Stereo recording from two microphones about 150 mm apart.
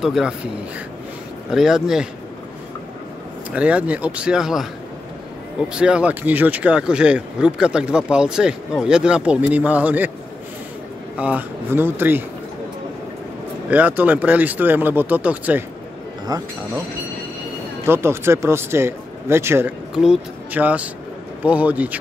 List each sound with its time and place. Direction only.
0.0 s speech: centre (ahead or behind)
1.5 s speech: 5° right (ahead or behind)
3.5 s speech: 10° right (ahead or behind)
5.7 s speech: 5° right (ahead or behind)
11.1 s speech: 10° right (ahead or behind)
13.7 s speech: 10° right (ahead or behind)
16.3 s speech: 25° right (ahead or behind)
17.8 s speech: 15° right (ahead or behind)
19.9 s speech: 5° right (ahead or behind)